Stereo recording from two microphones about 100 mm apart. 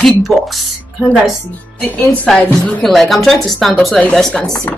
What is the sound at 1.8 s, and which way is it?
Speech, 15° left (ahead or behind).